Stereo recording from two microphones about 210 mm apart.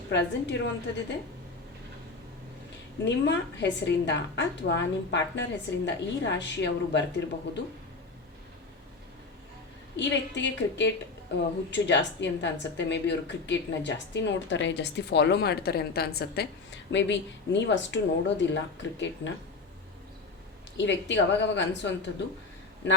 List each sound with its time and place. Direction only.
0.1 s a woman's voice: 55° left (ahead or behind)
3.0 s a woman's voice: 55° left (ahead or behind)
10.0 s a woman's voice: 60° left (ahead or behind)
20.7 s a woman's voice: 60° left (ahead or behind)